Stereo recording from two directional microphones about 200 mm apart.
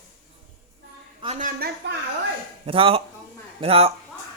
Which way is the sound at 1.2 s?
35° right (ahead or behind).